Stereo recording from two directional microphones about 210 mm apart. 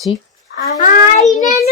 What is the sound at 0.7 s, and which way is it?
Speech, 35° left (ahead or behind).